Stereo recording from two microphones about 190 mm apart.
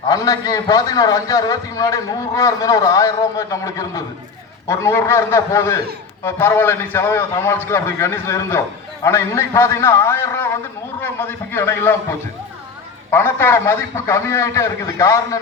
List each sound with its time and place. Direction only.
0.1 s a man's voice: 20° left (ahead or behind)
13.1 s a man's voice: 15° left (ahead or behind)